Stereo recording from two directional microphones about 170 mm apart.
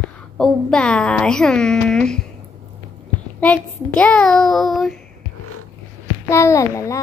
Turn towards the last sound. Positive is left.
turn(degrees=20)  # may be behind; listen again after turning